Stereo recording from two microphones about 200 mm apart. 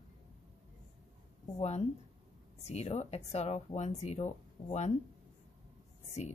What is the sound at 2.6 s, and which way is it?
A woman's voice, 35° left (ahead or behind).